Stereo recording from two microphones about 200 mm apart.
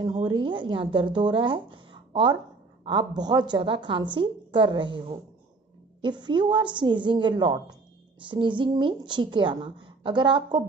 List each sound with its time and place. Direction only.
0.0 s a woman's voice: 20° right (ahead or behind)